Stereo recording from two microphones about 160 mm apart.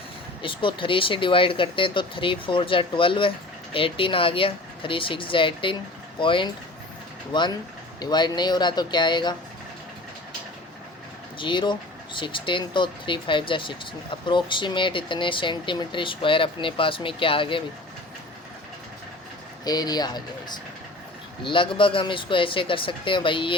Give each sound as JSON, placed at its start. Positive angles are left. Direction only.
{"t": 0.4, "sound": "speech", "side_deg": 30}
{"t": 7.9, "sound": "speech", "side_deg": 25}
{"t": 11.3, "sound": "speech", "side_deg": 30}
{"t": 19.6, "sound": "speech", "side_deg": 25}
{"t": 21.4, "sound": "speech", "side_deg": 30}